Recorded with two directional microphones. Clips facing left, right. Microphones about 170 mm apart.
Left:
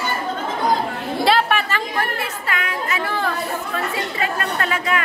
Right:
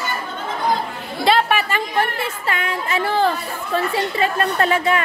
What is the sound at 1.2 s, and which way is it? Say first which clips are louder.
Chatter: right 1 dB; centre (ahead or behind).